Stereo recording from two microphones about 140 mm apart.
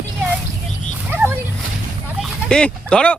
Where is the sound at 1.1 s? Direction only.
15° right (ahead or behind).